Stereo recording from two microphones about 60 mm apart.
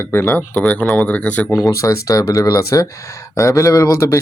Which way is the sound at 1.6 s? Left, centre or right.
Left.